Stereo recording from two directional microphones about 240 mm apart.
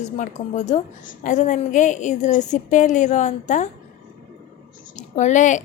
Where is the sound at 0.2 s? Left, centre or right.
Left.